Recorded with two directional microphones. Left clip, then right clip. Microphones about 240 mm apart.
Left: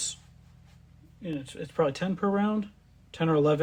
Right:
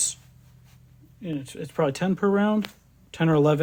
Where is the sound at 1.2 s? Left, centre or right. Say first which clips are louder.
Right 3 dB; right.